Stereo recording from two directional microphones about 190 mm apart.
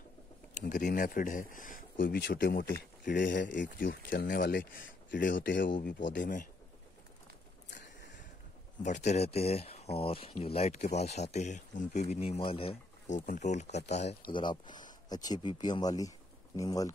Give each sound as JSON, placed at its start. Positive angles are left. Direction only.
{"t": 0.6, "sound": "speech", "side_deg": 45}
{"t": 3.3, "sound": "speech", "side_deg": 70}
{"t": 4.1, "sound": "speech", "side_deg": 50}
{"t": 7.8, "sound": "a sound", "side_deg": 70}
{"t": 8.8, "sound": "speech", "side_deg": 40}
{"t": 14.3, "sound": "speech", "side_deg": 25}